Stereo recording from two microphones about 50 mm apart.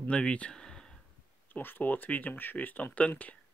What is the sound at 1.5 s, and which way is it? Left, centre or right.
Speech, left.